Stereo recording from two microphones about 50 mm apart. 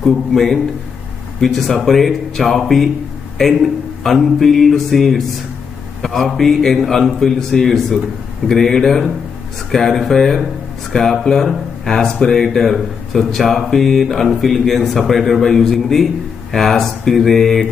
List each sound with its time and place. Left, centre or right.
0.0 s speech: centre